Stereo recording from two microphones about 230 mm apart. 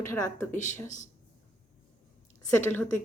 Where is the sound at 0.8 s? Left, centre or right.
Left.